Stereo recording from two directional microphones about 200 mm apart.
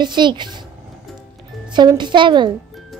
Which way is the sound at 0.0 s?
20° right (ahead or behind).